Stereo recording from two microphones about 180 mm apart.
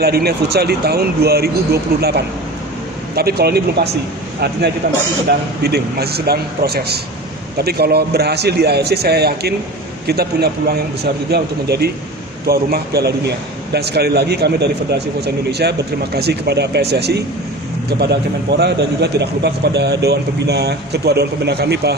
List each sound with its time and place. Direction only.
0.0 s speech: 60° right (ahead or behind)
5.6 s a man's voice: 60° right (ahead or behind)